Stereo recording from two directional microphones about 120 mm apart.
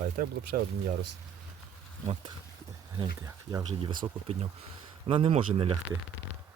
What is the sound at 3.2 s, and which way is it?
Speech, 25° right (ahead or behind).